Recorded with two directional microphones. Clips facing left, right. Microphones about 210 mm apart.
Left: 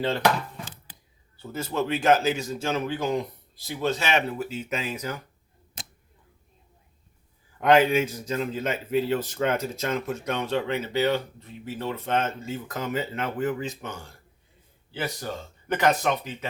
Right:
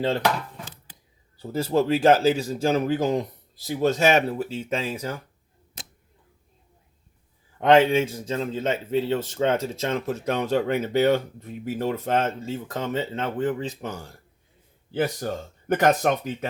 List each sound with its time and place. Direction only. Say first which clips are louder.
1.4 s a man's voice: right 6 dB; 35° right (ahead or behind)
7.6 s a man's voice: right 2 dB; 25° right (ahead or behind); by 16.5 s 50° right (ahead or behind)